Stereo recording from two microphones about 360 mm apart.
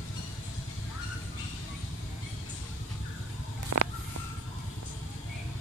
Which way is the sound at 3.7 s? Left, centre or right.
Right.